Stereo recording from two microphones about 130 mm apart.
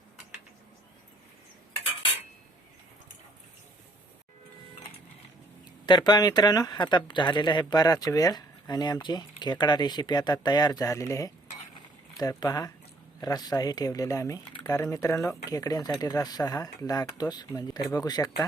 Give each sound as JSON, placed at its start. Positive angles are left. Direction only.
{"t": 5.8, "sound": "speech", "side_deg": 35}